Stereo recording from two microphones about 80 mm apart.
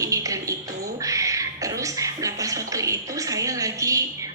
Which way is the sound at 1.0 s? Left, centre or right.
Right.